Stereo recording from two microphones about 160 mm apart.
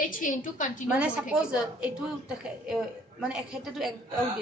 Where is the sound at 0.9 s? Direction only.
5° right (ahead or behind).